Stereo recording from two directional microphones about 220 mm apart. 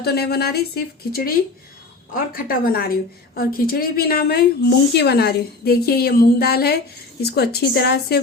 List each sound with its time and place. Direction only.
0.0 s a woman's voice: 45° left (ahead or behind)